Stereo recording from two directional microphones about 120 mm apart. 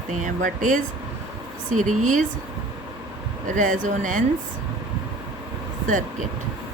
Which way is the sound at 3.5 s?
90° right.